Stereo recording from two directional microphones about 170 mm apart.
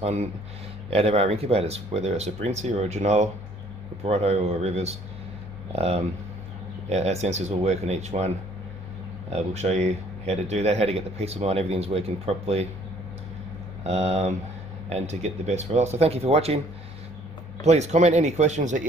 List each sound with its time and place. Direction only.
0.0 s a man's voice: 40° right (ahead or behind)
9.3 s a man's voice: 40° right (ahead or behind)
13.8 s a man's voice: 40° right (ahead or behind)
17.6 s a man's voice: 40° right (ahead or behind)